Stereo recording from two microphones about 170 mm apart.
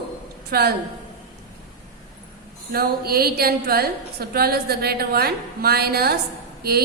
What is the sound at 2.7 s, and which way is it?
A woman's voice, 65° right (ahead or behind).